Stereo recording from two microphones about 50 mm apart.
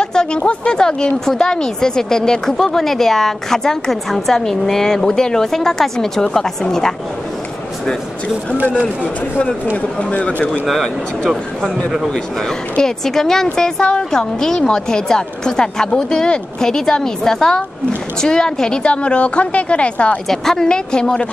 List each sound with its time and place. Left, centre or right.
0.0 s a woman's voice: centre
9.8 s a woman's voice: left
12.1 s a woman's voice: centre
20.2 s a woman's voice: centre